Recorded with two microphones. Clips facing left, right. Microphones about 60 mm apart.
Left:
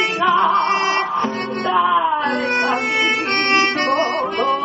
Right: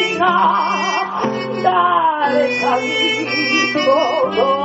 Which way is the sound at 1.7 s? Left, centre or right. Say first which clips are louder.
Even; centre.